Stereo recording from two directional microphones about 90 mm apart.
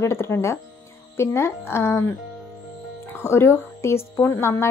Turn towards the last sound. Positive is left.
turn(degrees=30)  # may be behind; listen again after turning